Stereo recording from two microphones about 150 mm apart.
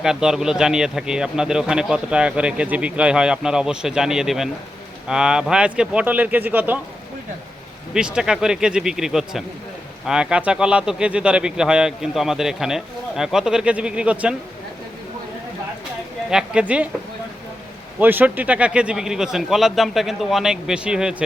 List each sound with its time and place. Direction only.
0.0 s a man's voice: 5° right (ahead or behind)
7.9 s a man's voice: 5° right (ahead or behind)
16.3 s a man's voice: 5° right (ahead or behind)
18.0 s a man's voice: 10° right (ahead or behind)